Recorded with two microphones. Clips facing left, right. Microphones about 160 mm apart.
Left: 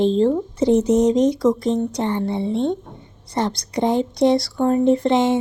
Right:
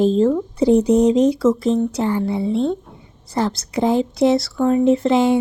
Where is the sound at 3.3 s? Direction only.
5° right (ahead or behind).